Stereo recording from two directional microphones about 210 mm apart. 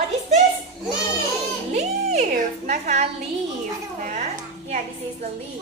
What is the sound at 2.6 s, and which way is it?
Speech, 35° right (ahead or behind).